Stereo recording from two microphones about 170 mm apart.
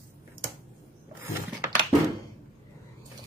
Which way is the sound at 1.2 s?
20° right (ahead or behind).